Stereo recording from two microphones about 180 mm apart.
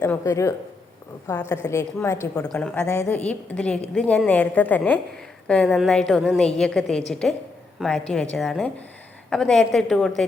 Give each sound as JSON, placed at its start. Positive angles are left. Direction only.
{"t": 0.0, "sound": "a woman's voice", "side_deg": 15}
{"t": 2.4, "sound": "a woman's voice", "side_deg": 5}